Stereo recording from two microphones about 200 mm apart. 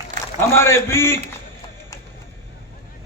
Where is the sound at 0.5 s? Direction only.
10° left (ahead or behind).